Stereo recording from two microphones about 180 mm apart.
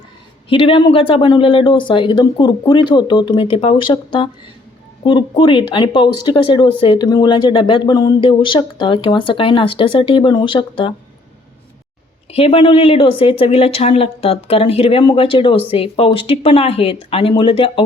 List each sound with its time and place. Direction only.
0.5 s speech: 30° left (ahead or behind)
12.3 s speech: 30° left (ahead or behind)